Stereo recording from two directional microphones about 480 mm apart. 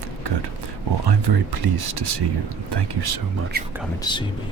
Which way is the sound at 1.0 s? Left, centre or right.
Right.